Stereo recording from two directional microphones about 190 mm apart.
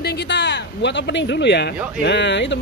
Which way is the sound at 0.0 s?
60° left (ahead or behind).